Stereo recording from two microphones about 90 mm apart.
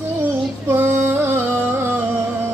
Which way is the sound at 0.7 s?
25° right (ahead or behind).